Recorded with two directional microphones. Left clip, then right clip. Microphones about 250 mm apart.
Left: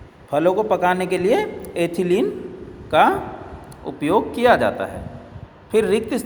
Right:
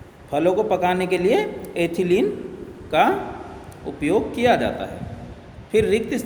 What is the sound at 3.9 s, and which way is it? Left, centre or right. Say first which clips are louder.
A man's voice: left 2 dB; centre.